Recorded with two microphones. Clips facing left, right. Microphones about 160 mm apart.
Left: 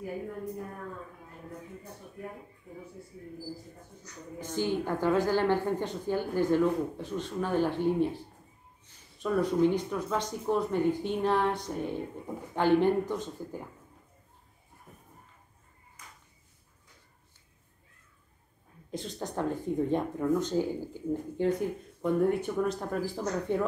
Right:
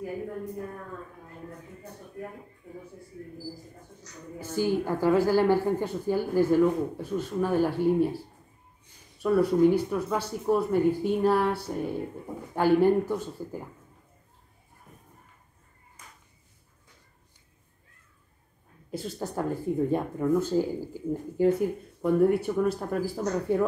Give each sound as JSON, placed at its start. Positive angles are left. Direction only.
{"t": 4.4, "sound": "a woman's voice", "side_deg": -10}
{"t": 18.9, "sound": "a woman's voice", "side_deg": -5}